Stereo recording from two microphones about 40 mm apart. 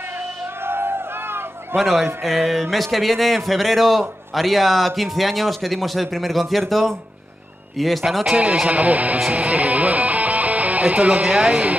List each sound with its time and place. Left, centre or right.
0.7 s a sound: right
2.2 s speech: centre
8.6 s speech: right
9.3 s music: right